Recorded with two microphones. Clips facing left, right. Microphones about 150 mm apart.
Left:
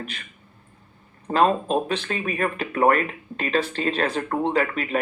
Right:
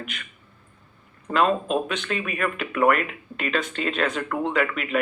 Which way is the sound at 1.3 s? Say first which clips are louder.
Left 2 dB; 35° left (ahead or behind).